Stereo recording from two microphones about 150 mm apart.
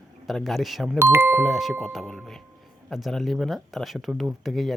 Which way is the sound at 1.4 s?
Centre (ahead or behind).